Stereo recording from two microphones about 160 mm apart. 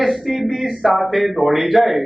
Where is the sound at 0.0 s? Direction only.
5° right (ahead or behind).